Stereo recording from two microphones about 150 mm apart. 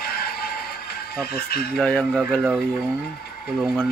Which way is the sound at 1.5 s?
90° left.